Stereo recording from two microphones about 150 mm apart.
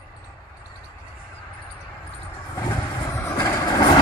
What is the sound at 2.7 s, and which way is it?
Vehicle, 25° left (ahead or behind).